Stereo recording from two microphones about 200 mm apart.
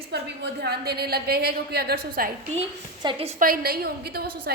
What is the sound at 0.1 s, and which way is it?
A woman's voice, 55° right (ahead or behind).